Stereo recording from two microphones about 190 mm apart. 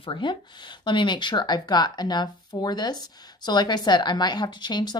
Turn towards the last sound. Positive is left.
turn(degrees=20)  # may be behind; listen again after turning